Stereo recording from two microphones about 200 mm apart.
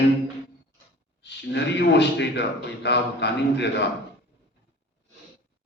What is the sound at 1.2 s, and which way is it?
A man's voice, 55° left (ahead or behind).